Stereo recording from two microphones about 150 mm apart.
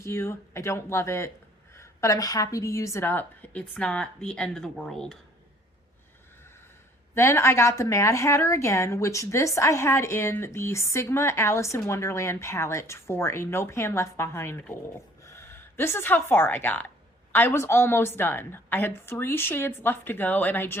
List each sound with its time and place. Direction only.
0.0 s a woman's voice: 15° left (ahead or behind)
7.1 s a woman's voice: 15° left (ahead or behind)